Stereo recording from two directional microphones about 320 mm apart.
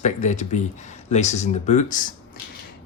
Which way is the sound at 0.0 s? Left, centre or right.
Left.